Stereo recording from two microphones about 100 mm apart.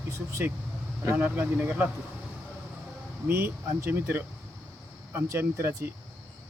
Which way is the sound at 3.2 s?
20° right (ahead or behind).